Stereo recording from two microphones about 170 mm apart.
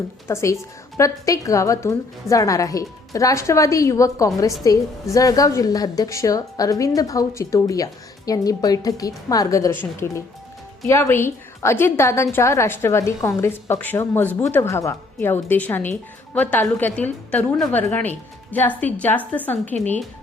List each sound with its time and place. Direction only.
0.3 s a woman's voice: 15° left (ahead or behind)